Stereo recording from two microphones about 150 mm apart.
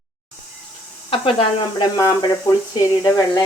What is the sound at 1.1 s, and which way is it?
A woman's voice, 35° left (ahead or behind).